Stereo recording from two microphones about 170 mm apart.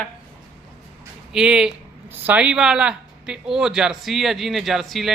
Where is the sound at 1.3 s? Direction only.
5° right (ahead or behind).